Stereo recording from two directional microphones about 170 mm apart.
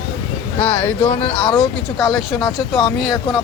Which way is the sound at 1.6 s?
Centre (ahead or behind).